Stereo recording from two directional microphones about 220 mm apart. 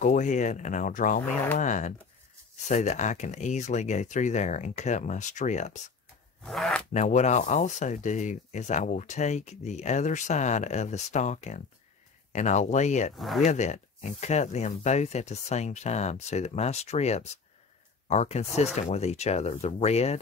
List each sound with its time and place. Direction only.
0.0 s speech: 35° left (ahead or behind)
6.4 s speech: centre (ahead or behind)
6.9 s speech: 35° left (ahead or behind)
13.1 s speech: centre (ahead or behind)
13.4 s speech: 30° left (ahead or behind)